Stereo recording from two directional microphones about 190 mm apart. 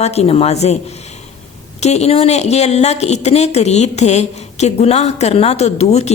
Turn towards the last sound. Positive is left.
turn(degrees=35)  # may be behind; listen again after turning